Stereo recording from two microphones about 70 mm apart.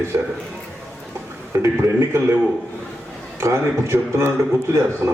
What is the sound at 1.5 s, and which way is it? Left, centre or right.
Speech, right.